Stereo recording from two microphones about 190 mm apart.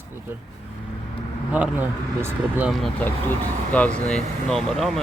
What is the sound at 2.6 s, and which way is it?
Speech, 5° right (ahead or behind).